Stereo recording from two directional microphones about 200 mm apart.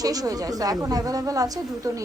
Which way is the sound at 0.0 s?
20° right (ahead or behind).